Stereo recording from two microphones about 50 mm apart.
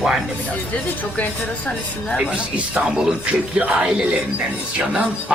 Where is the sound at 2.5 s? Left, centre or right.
Right.